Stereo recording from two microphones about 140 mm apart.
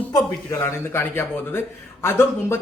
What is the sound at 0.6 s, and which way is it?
A man's voice, 15° left (ahead or behind).